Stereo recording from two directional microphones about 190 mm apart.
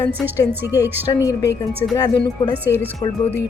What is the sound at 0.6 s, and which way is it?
Speech, 10° right (ahead or behind).